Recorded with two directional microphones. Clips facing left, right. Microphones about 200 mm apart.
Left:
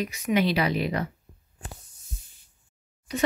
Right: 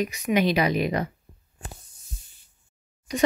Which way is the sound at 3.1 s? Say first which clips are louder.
Right 3 dB; 10° right (ahead or behind).